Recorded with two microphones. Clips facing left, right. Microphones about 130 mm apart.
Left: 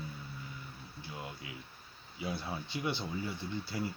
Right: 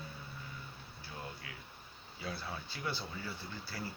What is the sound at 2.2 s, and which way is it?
Speech, 20° left (ahead or behind).